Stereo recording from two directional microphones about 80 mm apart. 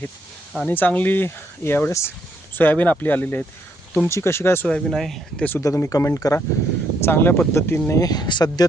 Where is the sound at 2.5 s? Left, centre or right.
Left.